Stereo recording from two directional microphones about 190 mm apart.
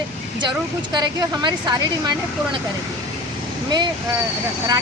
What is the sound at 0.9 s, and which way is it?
Speech, 20° right (ahead or behind).